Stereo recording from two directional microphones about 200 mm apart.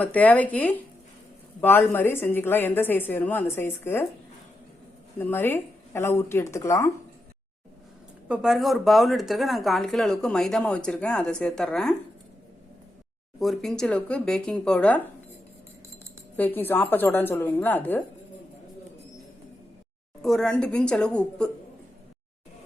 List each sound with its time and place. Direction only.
0.0 s a woman's voice: 5° left (ahead or behind)
5.1 s a woman's voice: 10° left (ahead or behind)
8.3 s speech: centre (ahead or behind)
13.4 s speech: centre (ahead or behind)
16.4 s a woman's voice: 10° left (ahead or behind)
20.2 s speech: centre (ahead or behind)